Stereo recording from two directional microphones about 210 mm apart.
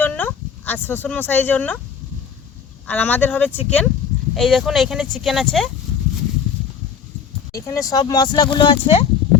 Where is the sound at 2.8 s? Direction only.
10° left (ahead or behind).